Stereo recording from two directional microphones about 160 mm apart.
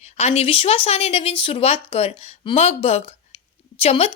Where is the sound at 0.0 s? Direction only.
40° left (ahead or behind).